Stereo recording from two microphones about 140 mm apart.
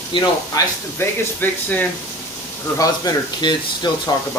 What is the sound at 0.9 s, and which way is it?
Speech, 15° left (ahead or behind).